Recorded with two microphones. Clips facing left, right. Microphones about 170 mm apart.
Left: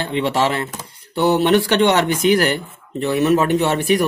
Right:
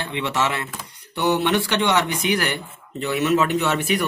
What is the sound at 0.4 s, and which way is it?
Speech, 35° left (ahead or behind).